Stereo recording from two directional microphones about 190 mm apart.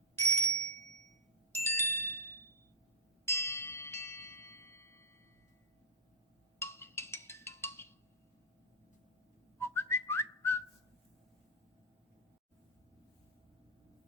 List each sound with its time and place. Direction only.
0.2 s bicycle bell: 10° left (ahead or behind)
1.5 s glockenspiel: 15° left (ahead or behind)
3.2 s bell: 15° left (ahead or behind)
6.6 s music: 15° left (ahead or behind)
9.6 s whistling: 15° left (ahead or behind)